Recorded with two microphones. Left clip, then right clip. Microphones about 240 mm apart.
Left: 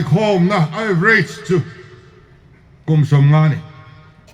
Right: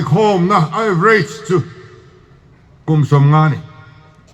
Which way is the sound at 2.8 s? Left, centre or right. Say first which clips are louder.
Right 3 dB; right.